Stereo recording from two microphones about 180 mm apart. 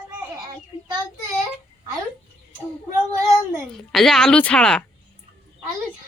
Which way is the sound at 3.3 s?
Centre (ahead or behind).